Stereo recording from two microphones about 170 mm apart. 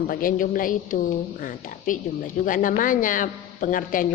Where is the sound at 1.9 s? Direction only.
50° left (ahead or behind).